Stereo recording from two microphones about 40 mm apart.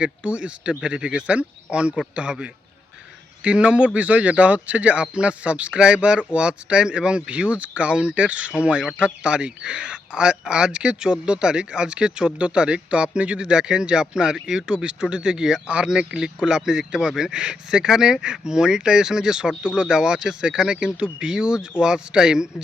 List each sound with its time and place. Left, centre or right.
0.0 s speech: right
3.4 s speech: right